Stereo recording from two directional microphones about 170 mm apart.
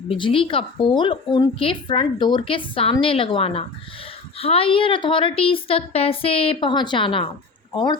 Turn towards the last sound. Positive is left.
turn(degrees=25)  # may be behind; listen again after turning